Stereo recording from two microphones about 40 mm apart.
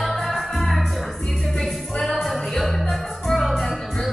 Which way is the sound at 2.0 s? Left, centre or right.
Centre.